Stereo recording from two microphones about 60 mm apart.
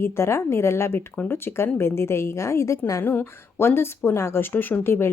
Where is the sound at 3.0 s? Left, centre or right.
Left.